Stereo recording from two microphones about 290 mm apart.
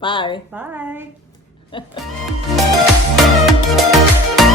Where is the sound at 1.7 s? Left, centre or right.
Centre.